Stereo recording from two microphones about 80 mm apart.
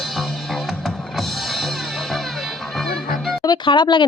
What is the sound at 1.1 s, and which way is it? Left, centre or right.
Music, centre.